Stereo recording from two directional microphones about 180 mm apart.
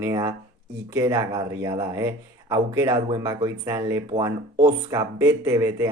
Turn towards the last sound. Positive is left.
turn(degrees=-15)  # may be behind; listen again after turning